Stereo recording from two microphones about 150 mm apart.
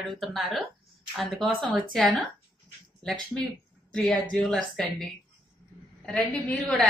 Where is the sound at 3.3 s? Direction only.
5° left (ahead or behind).